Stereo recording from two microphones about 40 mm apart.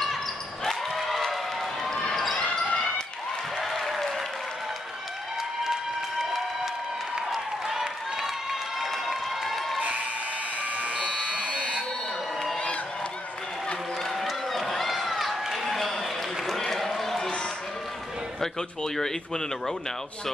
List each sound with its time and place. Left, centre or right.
0.7 s basketball bounce: centre
1.3 s run: centre
2.1 s basketball bounce: centre
2.4 s basketball bounce: left
3.5 s applause: centre
7.2 s applause: centre
10.6 s a sound: right
11.1 s buzzer: right
14.5 s run: centre
15.5 s a sound: centre
18.4 s speech: centre